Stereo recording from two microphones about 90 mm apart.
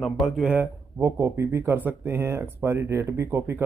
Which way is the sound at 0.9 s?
35° right (ahead or behind).